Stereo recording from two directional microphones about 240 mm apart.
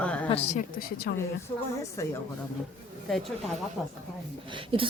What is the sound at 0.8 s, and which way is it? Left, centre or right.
Speech, left.